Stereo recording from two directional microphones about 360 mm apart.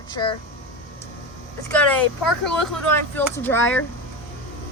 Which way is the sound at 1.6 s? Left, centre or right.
Centre.